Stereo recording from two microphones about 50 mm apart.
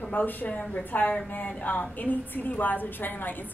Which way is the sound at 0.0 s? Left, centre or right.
Left.